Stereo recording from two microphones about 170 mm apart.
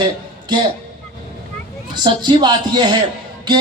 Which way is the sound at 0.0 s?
25° right (ahead or behind).